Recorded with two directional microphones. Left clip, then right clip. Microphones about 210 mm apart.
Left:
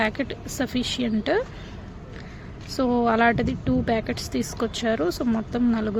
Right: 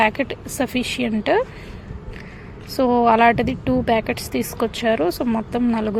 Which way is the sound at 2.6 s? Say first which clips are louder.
Right 6 dB; centre (ahead or behind).